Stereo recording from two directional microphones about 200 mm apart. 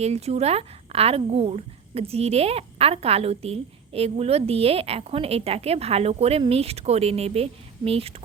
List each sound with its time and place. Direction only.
0.0 s a woman's voice: 30° right (ahead or behind)